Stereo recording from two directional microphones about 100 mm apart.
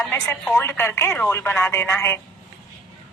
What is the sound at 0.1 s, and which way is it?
Speech, 25° left (ahead or behind).